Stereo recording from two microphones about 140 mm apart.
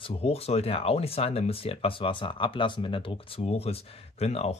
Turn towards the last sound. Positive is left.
turn(degrees=50)  # may be behind; listen again after turning